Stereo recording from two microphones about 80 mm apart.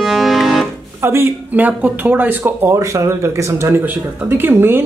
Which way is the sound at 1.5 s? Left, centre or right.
Centre.